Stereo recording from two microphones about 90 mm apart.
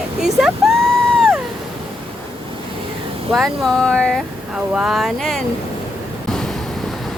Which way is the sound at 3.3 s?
5° left (ahead or behind).